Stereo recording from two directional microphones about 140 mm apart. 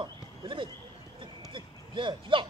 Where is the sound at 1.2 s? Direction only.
35° right (ahead or behind).